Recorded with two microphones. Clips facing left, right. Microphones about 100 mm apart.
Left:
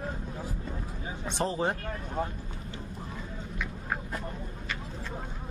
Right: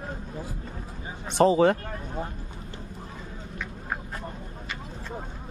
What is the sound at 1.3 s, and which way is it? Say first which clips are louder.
Speech: right 11 dB; 85° right.